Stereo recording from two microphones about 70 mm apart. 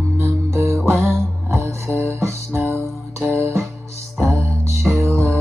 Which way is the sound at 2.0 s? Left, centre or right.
Right.